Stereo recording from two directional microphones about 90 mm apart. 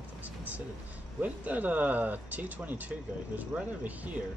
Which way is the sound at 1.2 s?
15° right (ahead or behind).